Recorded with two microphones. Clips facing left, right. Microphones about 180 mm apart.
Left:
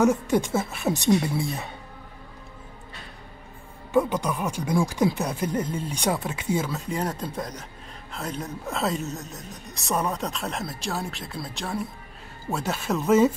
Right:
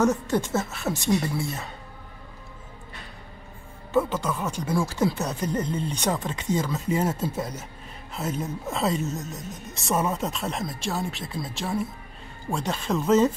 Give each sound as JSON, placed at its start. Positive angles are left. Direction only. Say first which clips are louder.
{"t": 0.0, "sound": "speech", "louder": "left 2 dB", "side_deg": 10}
{"t": 3.9, "sound": "a woman's voice", "louder": "left 1 dB", "side_deg": 15}